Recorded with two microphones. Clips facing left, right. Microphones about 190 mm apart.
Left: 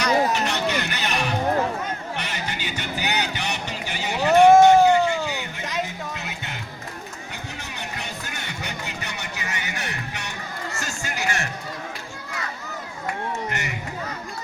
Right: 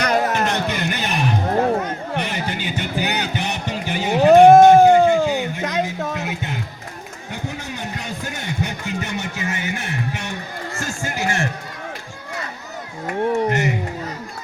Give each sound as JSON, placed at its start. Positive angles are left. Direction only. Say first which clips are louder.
{"t": 0.0, "sound": "music", "louder": "right 2 dB", "side_deg": -60}
{"t": 8.6, "sound": "music", "louder": "right 7 dB", "side_deg": -50}
{"t": 10.8, "sound": "run", "louder": "right 7 dB", "side_deg": -50}
{"t": 13.3, "sound": "a sound", "louder": "right 10 dB", "side_deg": -50}